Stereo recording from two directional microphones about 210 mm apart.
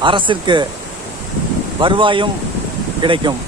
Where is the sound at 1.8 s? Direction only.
25° right (ahead or behind).